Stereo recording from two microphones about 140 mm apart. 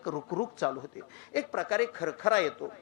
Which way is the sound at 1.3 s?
15° left (ahead or behind).